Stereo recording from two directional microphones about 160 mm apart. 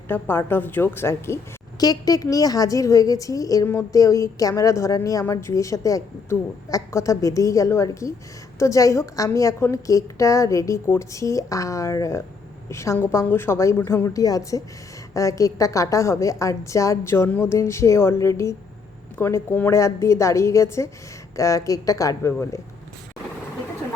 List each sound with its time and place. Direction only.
0.1 s a woman's voice: 15° left (ahead or behind)